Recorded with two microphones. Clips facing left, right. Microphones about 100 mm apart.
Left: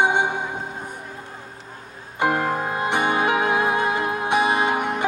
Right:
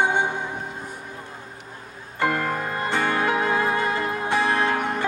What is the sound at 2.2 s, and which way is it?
Music, 20° left (ahead or behind).